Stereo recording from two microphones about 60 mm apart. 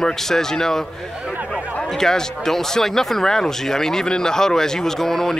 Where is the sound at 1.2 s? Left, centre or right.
Right.